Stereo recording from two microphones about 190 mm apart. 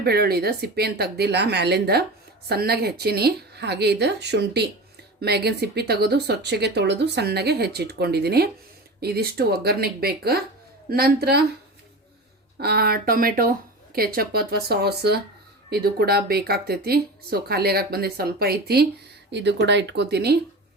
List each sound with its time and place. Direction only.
0.0 s speech: 55° right (ahead or behind)
12.5 s speech: 55° right (ahead or behind)
19.3 s speech: 65° right (ahead or behind)